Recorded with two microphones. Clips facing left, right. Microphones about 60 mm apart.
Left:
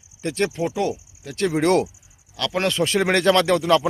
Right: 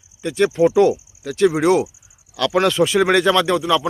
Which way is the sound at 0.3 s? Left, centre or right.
Right.